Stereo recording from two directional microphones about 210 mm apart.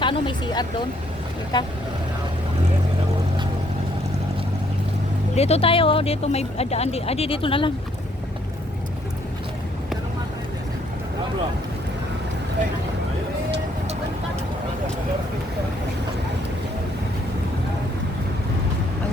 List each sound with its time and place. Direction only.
0.0 s speech: 20° left (ahead or behind)
5.3 s speech: 30° left (ahead or behind)